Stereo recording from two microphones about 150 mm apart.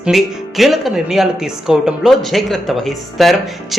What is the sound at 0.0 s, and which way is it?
Speech, centre (ahead or behind).